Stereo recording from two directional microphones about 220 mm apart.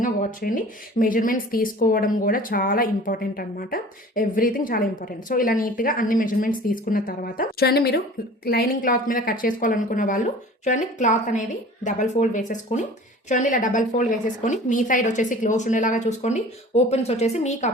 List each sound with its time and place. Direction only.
0.0 s speech: 35° left (ahead or behind)